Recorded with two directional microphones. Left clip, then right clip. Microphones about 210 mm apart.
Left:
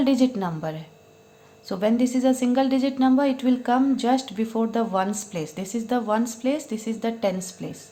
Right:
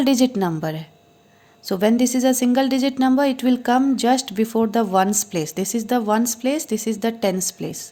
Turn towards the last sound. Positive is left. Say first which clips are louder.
# right 8 dB
turn(degrees=-40)  # may be behind; listen again after turning